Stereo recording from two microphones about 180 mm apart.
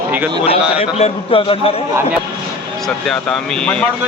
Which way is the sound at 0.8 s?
35° left (ahead or behind).